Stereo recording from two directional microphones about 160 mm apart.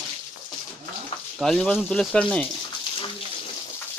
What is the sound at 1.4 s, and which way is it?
Speech, 5° left (ahead or behind).